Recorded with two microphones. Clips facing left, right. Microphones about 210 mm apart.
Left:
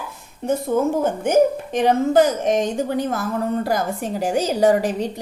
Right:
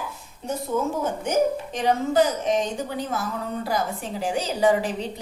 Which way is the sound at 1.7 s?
50° left (ahead or behind).